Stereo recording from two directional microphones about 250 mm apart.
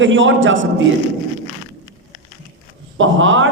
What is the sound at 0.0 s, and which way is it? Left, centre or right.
Speech, right.